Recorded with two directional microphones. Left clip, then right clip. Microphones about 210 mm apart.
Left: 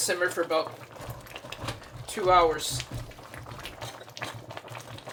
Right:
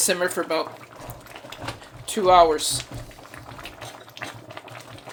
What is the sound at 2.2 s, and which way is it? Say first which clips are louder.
Speech: right 6 dB; 55° right (ahead or behind).